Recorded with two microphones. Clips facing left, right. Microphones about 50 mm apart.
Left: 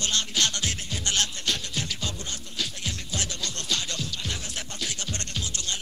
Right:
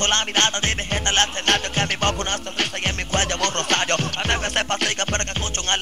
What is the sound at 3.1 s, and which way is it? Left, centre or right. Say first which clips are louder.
Music: right 13 dB; right.